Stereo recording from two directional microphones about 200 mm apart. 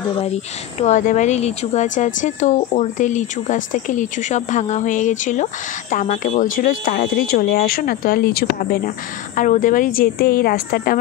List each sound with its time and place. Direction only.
0.7 s speech: 35° left (ahead or behind)